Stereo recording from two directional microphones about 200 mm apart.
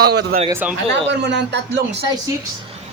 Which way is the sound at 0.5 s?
10° right (ahead or behind).